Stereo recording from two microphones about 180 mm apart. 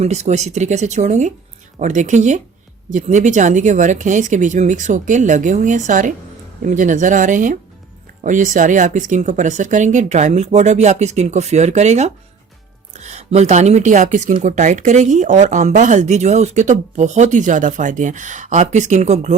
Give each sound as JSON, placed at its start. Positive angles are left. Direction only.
{"t": 0.0, "sound": "speech", "side_deg": -40}